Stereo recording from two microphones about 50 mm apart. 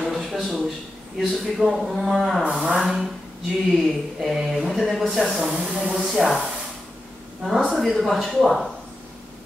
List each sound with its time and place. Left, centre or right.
0.0 s a sound: centre
1.1 s speech: centre
2.5 s speech: centre
2.8 s speech: centre
6.1 s speech: centre
7.7 s speech: centre